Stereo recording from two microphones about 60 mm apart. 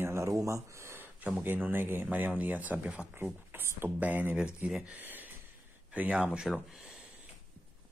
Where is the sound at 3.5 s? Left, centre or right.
Right.